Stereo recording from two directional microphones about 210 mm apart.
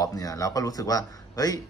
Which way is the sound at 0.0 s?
15° left (ahead or behind).